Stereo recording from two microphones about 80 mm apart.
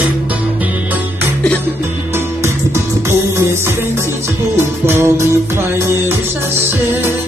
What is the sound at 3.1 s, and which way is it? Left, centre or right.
Music, right.